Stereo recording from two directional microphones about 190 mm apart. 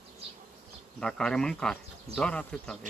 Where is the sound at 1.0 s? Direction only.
5° left (ahead or behind).